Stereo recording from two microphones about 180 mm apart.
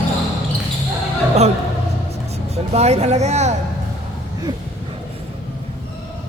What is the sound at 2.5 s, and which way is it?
Speech, 35° right (ahead or behind).